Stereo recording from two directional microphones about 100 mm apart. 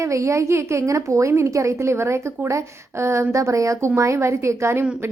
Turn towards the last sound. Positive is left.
turn(degrees=-25)  # may be behind; listen again after turning